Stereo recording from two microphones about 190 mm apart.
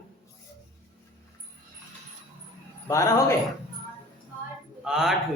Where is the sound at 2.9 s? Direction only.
15° left (ahead or behind).